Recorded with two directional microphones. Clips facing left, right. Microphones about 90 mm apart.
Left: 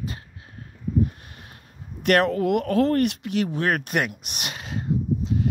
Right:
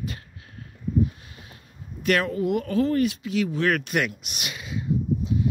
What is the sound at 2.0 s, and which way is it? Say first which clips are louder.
Speech: left 3 dB; 60° left (ahead or behind).